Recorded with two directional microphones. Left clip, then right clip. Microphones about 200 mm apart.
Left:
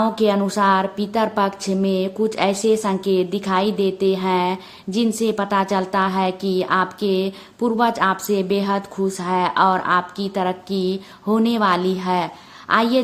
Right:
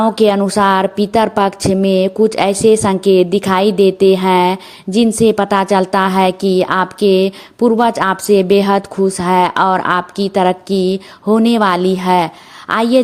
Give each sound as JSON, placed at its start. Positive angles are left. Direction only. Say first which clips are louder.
{"t": 0.0, "sound": "a woman's voice", "louder": "right 7 dB", "side_deg": -35}